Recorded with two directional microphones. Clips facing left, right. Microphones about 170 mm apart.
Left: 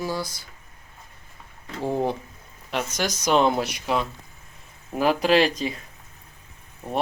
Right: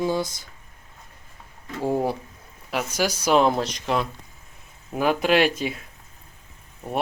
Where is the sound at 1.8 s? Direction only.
10° right (ahead or behind).